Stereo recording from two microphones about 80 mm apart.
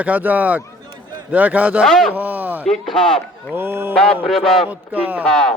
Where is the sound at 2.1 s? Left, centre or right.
Right.